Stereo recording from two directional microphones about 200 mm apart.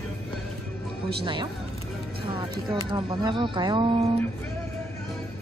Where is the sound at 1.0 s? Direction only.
25° right (ahead or behind).